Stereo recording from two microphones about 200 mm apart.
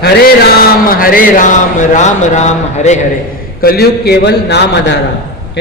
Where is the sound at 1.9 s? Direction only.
35° left (ahead or behind).